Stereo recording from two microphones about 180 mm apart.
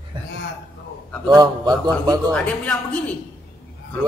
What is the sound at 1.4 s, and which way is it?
Speech, 25° right (ahead or behind).